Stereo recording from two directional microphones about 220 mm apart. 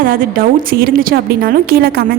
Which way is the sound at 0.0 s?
40° right (ahead or behind).